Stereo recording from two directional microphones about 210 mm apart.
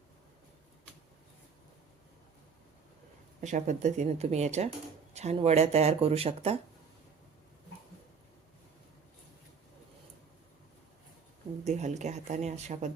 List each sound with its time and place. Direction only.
3.4 s speech: 35° right (ahead or behind)
11.6 s speech: 35° right (ahead or behind)